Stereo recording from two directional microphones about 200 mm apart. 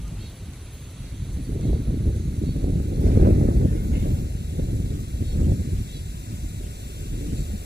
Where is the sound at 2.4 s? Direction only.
55° right (ahead or behind).